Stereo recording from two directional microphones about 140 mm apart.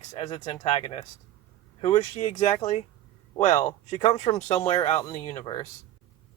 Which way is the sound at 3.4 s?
60° left (ahead or behind).